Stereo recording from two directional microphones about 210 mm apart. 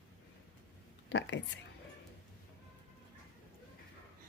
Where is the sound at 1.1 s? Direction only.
55° left (ahead or behind).